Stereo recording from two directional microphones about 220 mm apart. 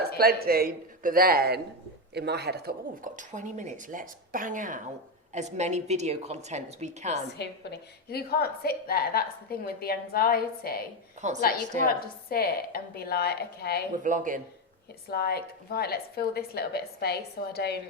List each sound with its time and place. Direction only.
0.2 s speech: 45° right (ahead or behind)
7.3 s a woman's voice: 45° left (ahead or behind)
11.2 s a woman's voice: 35° right (ahead or behind)
11.9 s a woman's voice: 45° left (ahead or behind)
14.0 s speech: 35° right (ahead or behind)
15.1 s a woman's voice: 45° left (ahead or behind)